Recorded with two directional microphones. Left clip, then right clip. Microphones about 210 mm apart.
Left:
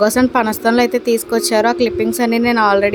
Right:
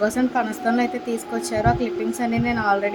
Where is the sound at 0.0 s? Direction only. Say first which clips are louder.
Left 8 dB; 45° left (ahead or behind).